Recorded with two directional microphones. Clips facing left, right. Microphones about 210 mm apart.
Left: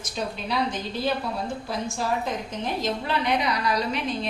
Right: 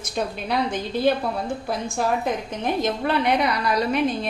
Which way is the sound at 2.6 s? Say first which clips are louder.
Right 6 dB; 55° right (ahead or behind).